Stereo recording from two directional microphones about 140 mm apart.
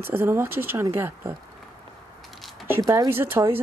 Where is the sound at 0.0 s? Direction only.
15° right (ahead or behind).